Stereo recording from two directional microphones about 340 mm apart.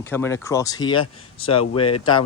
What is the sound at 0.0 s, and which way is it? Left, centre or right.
Speech, centre.